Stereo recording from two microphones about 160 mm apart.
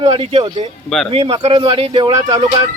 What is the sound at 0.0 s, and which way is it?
Speech, 40° right (ahead or behind).